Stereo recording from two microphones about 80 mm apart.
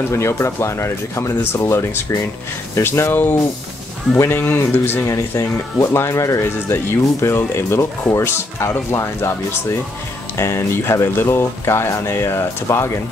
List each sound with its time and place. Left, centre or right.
0.1 s speech: left
5.0 s speech: left